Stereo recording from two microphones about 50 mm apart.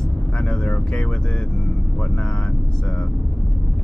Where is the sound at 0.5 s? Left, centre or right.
Centre.